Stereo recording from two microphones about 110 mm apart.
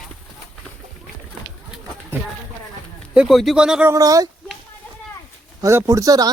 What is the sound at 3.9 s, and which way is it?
Speech, 30° right (ahead or behind).